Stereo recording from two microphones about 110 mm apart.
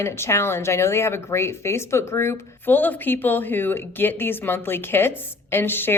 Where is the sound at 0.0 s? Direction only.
25° left (ahead or behind).